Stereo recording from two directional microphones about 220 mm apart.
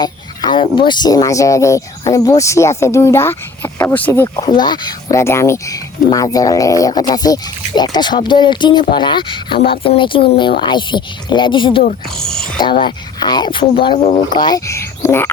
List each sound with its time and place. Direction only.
0.0 s a woman's voice: 20° left (ahead or behind)
12.0 s speech: 5° left (ahead or behind)
12.8 s a woman's voice: 20° left (ahead or behind)